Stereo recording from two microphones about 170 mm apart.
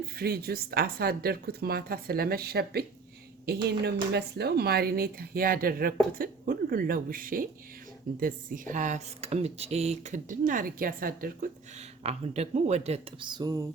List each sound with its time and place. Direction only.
0.2 s speech: 65° right (ahead or behind)
11.8 s speech: 40° right (ahead or behind); by 13.7 s 20° right (ahead or behind)